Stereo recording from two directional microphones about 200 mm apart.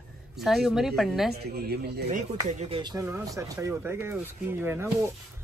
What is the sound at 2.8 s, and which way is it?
Speech, 15° right (ahead or behind).